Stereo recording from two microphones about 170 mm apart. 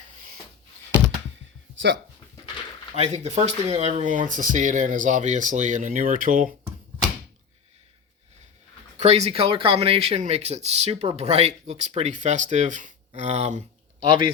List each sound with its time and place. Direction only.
1.8 s speech: 90° right
2.9 s speech: 40° right (ahead or behind)
9.0 s speech: 40° right (ahead or behind)
14.0 s speech: 25° right (ahead or behind)